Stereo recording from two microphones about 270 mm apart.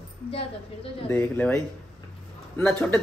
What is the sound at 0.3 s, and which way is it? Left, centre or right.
Speech, left.